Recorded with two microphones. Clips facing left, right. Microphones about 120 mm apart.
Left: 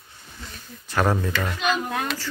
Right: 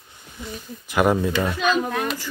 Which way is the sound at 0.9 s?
15° right (ahead or behind).